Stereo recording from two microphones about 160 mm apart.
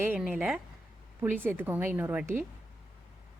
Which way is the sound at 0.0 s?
10° right (ahead or behind).